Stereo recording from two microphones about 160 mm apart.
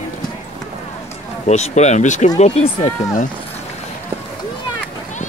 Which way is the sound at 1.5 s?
45° left (ahead or behind).